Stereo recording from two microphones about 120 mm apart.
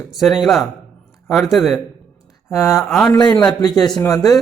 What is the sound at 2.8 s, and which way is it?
Speech, centre (ahead or behind).